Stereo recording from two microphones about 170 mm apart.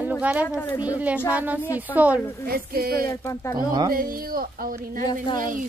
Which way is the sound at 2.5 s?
60° right (ahead or behind).